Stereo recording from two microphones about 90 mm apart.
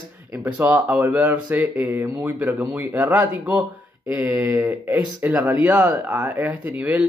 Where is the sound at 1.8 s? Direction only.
25° right (ahead or behind).